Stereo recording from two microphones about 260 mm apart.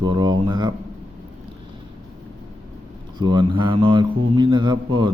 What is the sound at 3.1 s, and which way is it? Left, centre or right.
Speech, centre.